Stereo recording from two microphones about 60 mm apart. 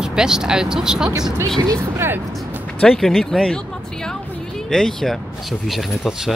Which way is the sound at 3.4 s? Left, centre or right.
Centre.